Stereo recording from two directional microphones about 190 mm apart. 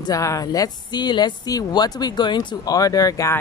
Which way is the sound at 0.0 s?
15° left (ahead or behind).